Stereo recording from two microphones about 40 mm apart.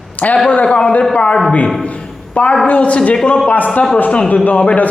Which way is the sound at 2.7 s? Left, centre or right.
Left.